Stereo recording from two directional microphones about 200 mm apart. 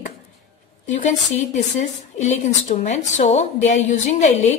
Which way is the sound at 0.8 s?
40° left (ahead or behind).